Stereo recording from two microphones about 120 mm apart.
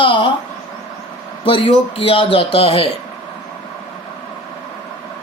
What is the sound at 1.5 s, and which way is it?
Speech, 50° left (ahead or behind).